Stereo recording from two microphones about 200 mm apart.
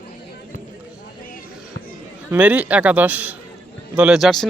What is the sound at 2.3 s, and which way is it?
A man's voice, 5° right (ahead or behind).